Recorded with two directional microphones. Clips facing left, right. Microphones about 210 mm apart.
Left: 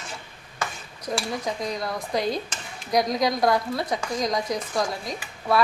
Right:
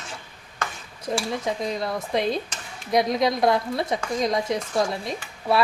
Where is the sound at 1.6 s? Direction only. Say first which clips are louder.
Right 2 dB; 25° right (ahead or behind).